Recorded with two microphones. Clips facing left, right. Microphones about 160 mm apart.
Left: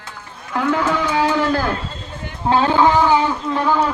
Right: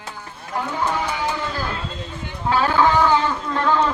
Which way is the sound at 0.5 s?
90° left.